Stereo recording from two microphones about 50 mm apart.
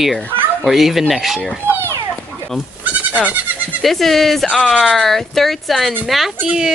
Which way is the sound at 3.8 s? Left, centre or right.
Centre.